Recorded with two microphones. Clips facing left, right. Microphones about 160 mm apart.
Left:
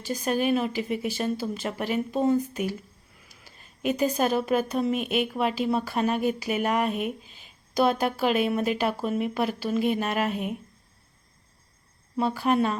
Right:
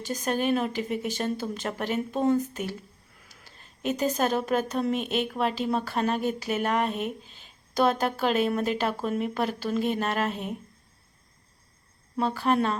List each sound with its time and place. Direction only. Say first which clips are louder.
0.0 s a woman's voice: left 1 dB; 10° left (ahead or behind)
12.1 s a woman's voice: left 1 dB; 10° left (ahead or behind)